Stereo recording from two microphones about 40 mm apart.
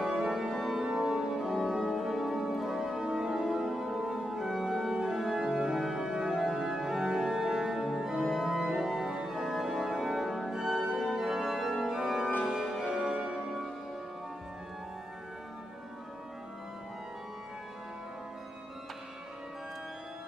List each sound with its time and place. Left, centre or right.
0.0 s organ: centre
12.5 s music: centre
13.0 s music: right